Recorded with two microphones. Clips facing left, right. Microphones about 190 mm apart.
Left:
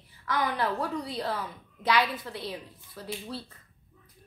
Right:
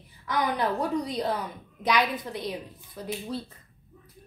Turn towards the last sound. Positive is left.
turn(degrees=-15)  # may be behind; listen again after turning